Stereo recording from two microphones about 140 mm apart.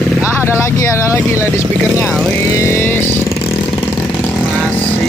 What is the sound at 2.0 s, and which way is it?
Speech, 5° left (ahead or behind).